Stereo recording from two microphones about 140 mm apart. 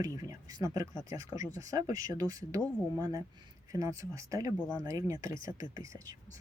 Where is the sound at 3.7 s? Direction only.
25° right (ahead or behind).